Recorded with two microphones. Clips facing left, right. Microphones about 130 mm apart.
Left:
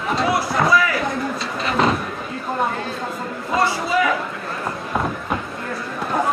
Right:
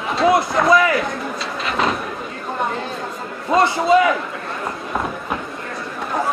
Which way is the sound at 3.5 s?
25° right (ahead or behind).